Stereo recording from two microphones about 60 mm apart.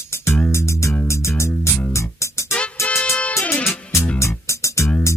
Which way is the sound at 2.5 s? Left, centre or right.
Left.